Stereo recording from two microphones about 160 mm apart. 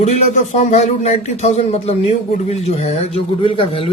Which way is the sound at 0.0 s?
45° left (ahead or behind).